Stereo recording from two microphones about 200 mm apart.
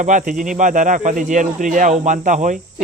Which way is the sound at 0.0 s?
40° right (ahead or behind).